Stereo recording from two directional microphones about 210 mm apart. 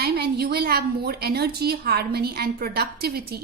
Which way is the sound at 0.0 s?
50° right (ahead or behind).